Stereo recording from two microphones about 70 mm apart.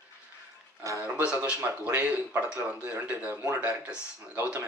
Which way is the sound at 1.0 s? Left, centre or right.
Centre.